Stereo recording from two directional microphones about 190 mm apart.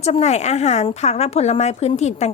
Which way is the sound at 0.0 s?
35° left (ahead or behind).